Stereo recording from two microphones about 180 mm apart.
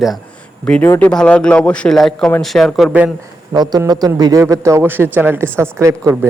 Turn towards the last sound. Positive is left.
turn(degrees=-15)  # may be behind; listen again after turning